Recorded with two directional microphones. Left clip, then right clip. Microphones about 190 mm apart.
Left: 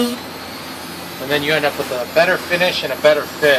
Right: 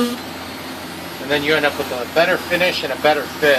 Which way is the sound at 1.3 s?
20° left (ahead or behind).